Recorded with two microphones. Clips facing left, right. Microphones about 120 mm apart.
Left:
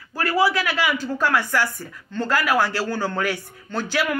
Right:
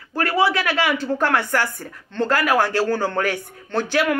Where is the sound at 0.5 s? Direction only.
55° right (ahead or behind).